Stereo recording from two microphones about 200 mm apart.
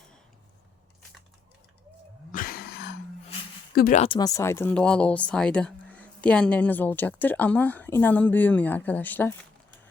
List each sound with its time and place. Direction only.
2.3 s a sound: 45° left (ahead or behind)
3.8 s speech: 45° left (ahead or behind)
4.0 s speech: 20° left (ahead or behind)